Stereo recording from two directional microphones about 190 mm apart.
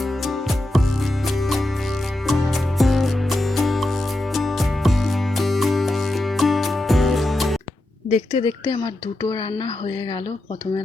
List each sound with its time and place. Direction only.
0.0 s music: centre (ahead or behind)
8.1 s a woman's voice: 30° left (ahead or behind)